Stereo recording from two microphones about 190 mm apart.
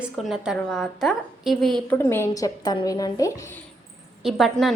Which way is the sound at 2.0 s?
10° left (ahead or behind).